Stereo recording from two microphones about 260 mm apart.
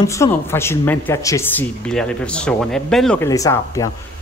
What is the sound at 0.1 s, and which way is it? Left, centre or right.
Speech, centre.